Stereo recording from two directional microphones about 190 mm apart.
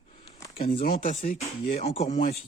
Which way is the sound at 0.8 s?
50° left (ahead or behind).